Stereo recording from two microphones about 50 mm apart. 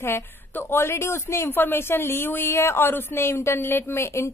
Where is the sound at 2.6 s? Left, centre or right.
Left.